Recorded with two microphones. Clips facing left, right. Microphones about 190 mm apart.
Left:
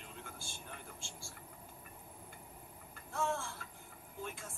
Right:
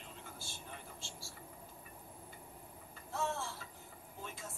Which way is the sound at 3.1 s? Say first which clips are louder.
Left 1 dB; 50° left (ahead or behind).